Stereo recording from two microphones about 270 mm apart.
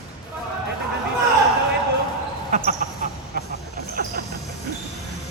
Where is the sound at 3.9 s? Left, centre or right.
Right.